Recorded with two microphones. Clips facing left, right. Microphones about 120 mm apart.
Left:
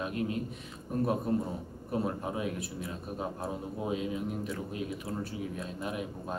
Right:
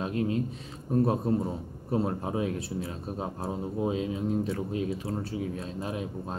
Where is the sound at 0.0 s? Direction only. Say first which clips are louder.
Right 4 dB; 30° right (ahead or behind).